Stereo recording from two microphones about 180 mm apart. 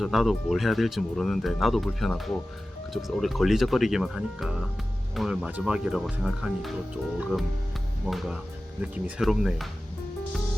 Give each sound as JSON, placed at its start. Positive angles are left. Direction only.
{"t": 0.0, "sound": "speech", "side_deg": 0}
{"t": 8.8, "sound": "speech", "side_deg": -5}